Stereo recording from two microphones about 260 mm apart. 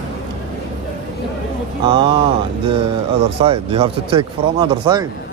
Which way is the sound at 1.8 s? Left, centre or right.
Centre.